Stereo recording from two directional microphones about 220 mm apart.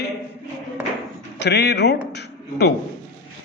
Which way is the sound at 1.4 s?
50° left (ahead or behind).